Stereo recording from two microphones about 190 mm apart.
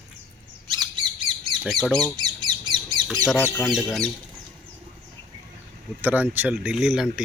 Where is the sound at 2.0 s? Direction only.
20° right (ahead or behind).